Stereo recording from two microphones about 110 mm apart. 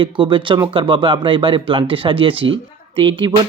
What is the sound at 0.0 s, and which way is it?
Speech, 50° right (ahead or behind).